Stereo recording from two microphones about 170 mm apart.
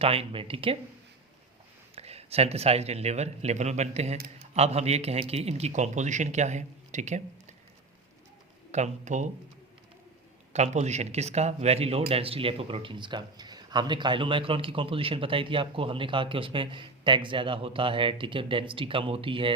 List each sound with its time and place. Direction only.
0.0 s speech: 35° right (ahead or behind)
2.0 s speech: 35° right (ahead or behind)
8.7 s speech: 45° right (ahead or behind)
10.5 s speech: 40° right (ahead or behind)